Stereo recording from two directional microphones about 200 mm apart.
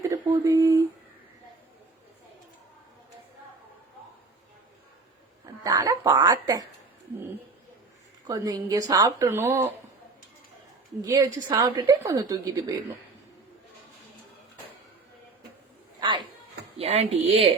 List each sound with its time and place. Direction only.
0.1 s a sound: 15° right (ahead or behind)
5.6 s speech: 20° right (ahead or behind)
8.3 s speech: 15° right (ahead or behind)
11.0 s a woman's voice: 15° right (ahead or behind)
16.0 s a sound: 20° right (ahead or behind)
16.7 s a woman's voice: 30° right (ahead or behind)